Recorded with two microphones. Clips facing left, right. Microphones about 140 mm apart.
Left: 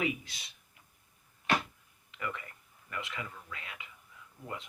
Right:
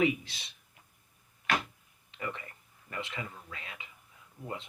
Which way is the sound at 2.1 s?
25° right (ahead or behind).